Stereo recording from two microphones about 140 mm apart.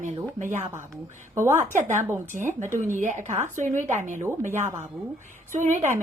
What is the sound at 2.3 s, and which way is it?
A woman's voice, 60° right (ahead or behind).